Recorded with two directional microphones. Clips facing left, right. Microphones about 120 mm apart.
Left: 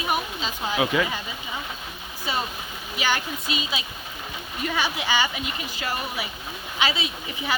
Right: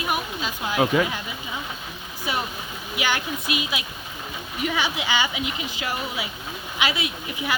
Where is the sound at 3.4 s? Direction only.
65° right (ahead or behind).